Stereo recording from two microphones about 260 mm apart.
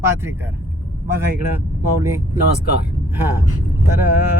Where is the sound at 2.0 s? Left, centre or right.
Centre.